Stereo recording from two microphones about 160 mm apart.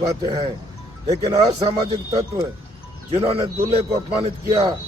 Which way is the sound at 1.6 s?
35° right (ahead or behind).